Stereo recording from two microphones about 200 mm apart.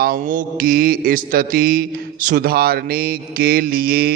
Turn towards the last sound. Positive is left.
turn(degrees=-50)  # may be behind; listen again after turning